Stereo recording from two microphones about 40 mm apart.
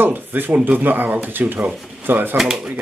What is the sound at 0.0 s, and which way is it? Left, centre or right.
Speech, right.